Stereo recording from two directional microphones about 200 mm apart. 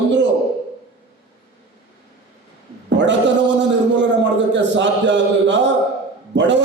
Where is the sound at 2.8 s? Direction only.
65° right (ahead or behind).